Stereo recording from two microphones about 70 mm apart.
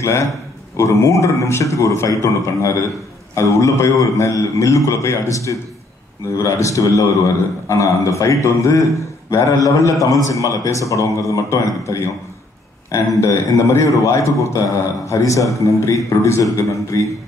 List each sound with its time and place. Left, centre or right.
0.0 s a man's voice: left